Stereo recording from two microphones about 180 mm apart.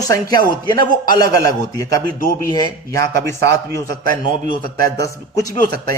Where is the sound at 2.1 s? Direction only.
50° left (ahead or behind).